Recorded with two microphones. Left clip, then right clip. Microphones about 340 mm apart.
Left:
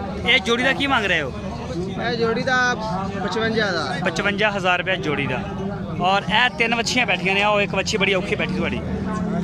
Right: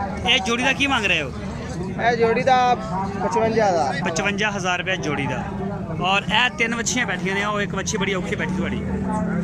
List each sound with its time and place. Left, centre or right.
0.3 s speech: centre
2.0 s speech: centre
4.0 s speech: centre